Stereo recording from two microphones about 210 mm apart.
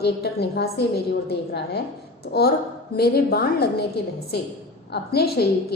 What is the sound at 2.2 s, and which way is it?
A woman's voice, 45° left (ahead or behind).